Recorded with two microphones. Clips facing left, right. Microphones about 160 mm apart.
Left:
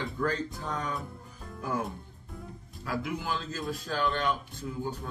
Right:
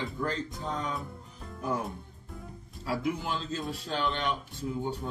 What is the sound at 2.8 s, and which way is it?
Speech, 25° right (ahead or behind).